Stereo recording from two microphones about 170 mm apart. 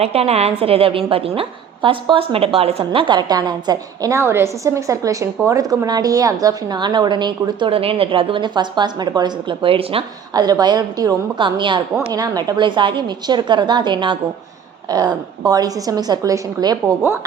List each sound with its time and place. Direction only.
0.0 s a woman's voice: 35° right (ahead or behind); by 16.9 s 20° right (ahead or behind)